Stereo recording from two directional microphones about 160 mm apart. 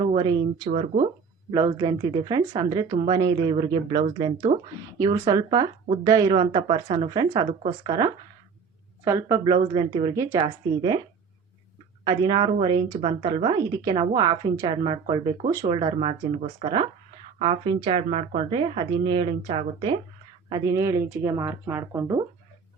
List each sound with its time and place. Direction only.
0.0 s a woman's voice: 25° right (ahead or behind)
4.9 s speech: 25° right (ahead or behind)
12.0 s a woman's voice: 30° right (ahead or behind)
20.5 s speech: 20° right (ahead or behind)